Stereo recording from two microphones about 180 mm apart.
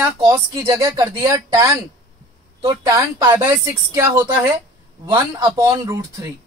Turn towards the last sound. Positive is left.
turn(degrees=-20)  # may be behind; listen again after turning